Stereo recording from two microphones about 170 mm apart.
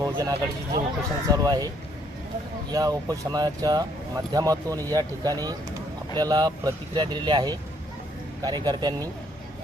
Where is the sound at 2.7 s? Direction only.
20° right (ahead or behind).